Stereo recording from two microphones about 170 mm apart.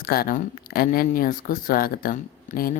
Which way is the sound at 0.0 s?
60° left (ahead or behind).